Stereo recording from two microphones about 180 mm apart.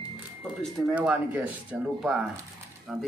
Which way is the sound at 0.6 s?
Centre (ahead or behind).